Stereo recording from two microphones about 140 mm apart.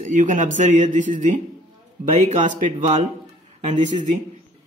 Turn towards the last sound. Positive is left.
turn(degrees=-60)  # may be behind; listen again after turning